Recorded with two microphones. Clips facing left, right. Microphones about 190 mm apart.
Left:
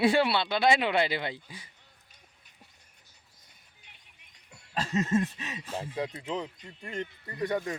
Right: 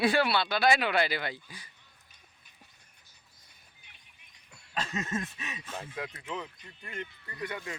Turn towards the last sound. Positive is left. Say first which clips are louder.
# left 8 dB
turn(degrees=35)  # may be behind; listen again after turning